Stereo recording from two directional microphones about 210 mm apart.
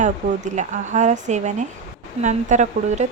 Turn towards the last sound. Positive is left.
turn(degrees=-35)  # may be behind; listen again after turning